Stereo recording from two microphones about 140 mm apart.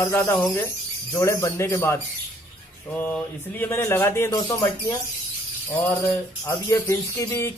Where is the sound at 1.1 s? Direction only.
20° left (ahead or behind).